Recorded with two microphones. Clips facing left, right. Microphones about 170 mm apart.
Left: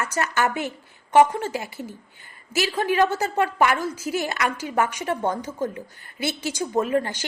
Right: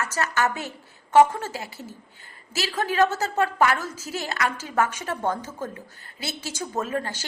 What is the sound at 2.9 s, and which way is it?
A woman's voice, 15° left (ahead or behind).